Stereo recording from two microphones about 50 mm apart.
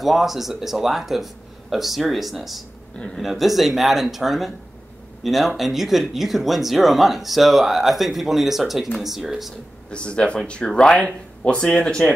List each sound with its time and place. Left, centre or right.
0.0 s speech: centre
9.8 s speech: left